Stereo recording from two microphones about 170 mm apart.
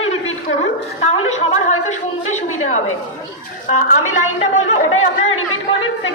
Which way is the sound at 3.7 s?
50° left (ahead or behind).